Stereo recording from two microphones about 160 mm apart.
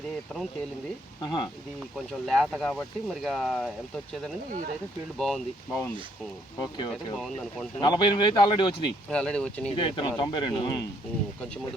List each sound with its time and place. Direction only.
1.2 s a man's voice: 30° left (ahead or behind)
2.0 s speech: centre (ahead or behind)
5.1 s speech: 5° left (ahead or behind)
6.6 s a man's voice: 30° left (ahead or behind)
6.9 s speech: centre (ahead or behind)
7.8 s a man's voice: 30° left (ahead or behind)
9.0 s speech: 5° left (ahead or behind)
9.7 s a man's voice: 30° left (ahead or behind)